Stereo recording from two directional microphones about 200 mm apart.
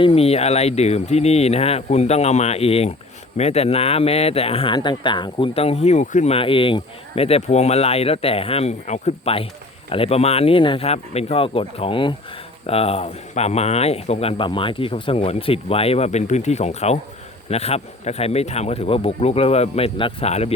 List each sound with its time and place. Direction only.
0.0 s speech: 30° left (ahead or behind)